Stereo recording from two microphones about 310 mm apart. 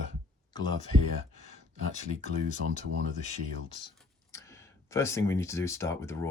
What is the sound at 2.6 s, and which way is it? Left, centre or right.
Speech, right.